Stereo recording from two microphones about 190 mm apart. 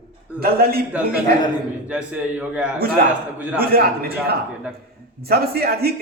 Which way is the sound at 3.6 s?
55° right (ahead or behind).